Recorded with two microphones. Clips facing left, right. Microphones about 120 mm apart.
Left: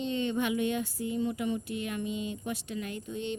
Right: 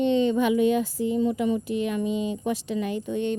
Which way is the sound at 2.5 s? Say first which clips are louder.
Right 9 dB; 90° right.